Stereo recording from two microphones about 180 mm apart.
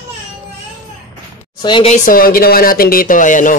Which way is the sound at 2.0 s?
55° left (ahead or behind).